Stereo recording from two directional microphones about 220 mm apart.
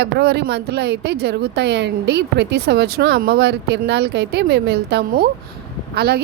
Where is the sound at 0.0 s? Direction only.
50° right (ahead or behind).